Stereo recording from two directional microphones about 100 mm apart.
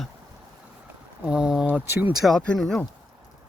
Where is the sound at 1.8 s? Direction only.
25° right (ahead or behind).